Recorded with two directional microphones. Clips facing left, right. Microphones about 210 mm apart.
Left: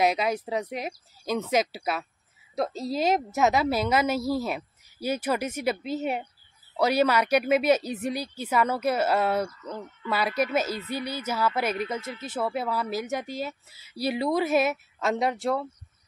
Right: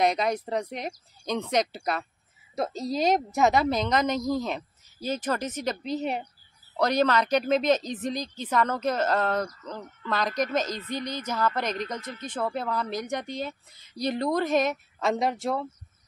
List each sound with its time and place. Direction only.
0.0 s a woman's voice: 5° left (ahead or behind)